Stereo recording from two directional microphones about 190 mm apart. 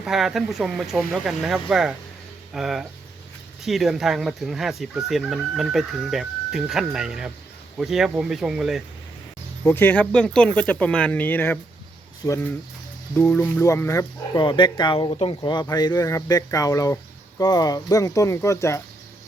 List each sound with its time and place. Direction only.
0.0 s speech: centre (ahead or behind)
9.6 s speech: 10° left (ahead or behind)